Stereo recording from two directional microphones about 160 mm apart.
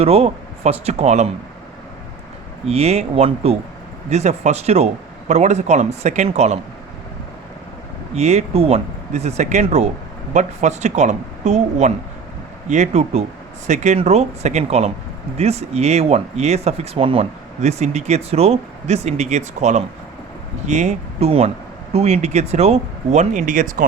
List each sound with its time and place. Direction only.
0.0 s speech: 40° right (ahead or behind)
2.6 s speech: 40° right (ahead or behind)
8.1 s speech: 45° right (ahead or behind)